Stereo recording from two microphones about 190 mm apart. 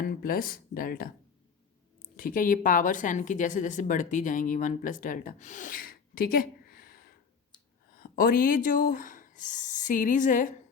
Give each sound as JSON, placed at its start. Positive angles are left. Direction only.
{"t": 0.0, "sound": "speech", "side_deg": 50}
{"t": 2.1, "sound": "a woman's voice", "side_deg": 45}